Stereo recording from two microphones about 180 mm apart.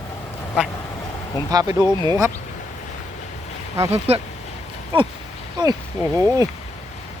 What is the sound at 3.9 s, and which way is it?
Speech, 35° right (ahead or behind).